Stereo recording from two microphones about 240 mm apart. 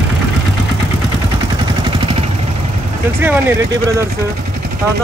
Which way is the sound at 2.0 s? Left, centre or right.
Right.